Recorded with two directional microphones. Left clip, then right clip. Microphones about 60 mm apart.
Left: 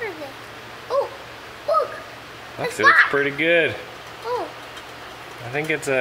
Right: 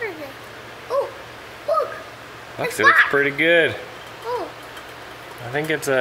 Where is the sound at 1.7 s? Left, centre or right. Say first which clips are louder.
Left 1 dB; right.